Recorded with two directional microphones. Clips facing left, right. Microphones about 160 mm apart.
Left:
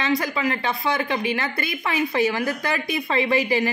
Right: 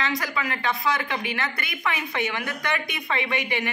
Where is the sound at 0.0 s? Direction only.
25° left (ahead or behind).